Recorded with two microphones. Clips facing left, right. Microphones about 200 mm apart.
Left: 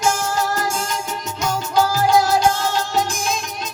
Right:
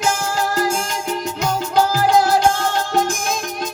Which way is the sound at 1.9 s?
55° right (ahead or behind).